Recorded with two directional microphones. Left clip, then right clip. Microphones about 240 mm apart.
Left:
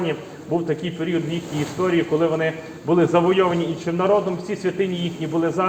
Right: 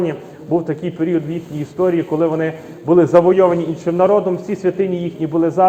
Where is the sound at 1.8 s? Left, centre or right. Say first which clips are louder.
Right 4 dB; right.